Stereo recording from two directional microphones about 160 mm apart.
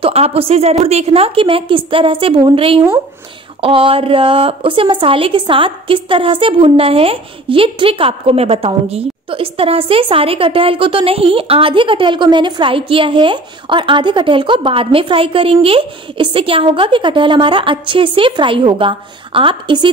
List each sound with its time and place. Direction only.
0.0 s a woman's voice: 40° right (ahead or behind)